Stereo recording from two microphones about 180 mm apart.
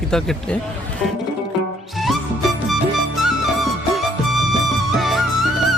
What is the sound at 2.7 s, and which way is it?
Music, centre (ahead or behind).